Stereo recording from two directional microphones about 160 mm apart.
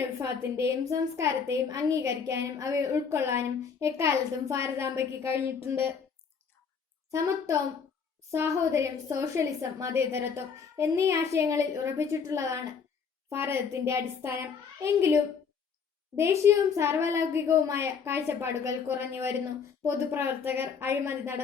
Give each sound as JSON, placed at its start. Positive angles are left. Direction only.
{"t": 0.2, "sound": "a woman's voice", "side_deg": -15}
{"t": 8.3, "sound": "a woman's voice", "side_deg": -20}